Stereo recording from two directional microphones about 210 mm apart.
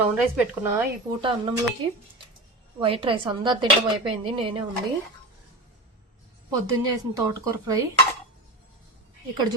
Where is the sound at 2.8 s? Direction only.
25° right (ahead or behind).